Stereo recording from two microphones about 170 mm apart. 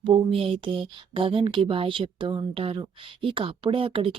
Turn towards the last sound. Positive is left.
turn(degrees=-35)  # may be behind; listen again after turning